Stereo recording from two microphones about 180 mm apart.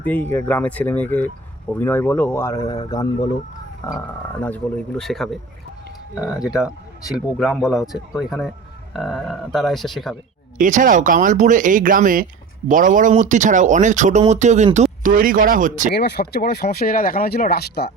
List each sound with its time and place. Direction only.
0.0 s speech: 10° left (ahead or behind)
10.6 s speech: 45° right (ahead or behind)
15.9 s speech: 65° left (ahead or behind)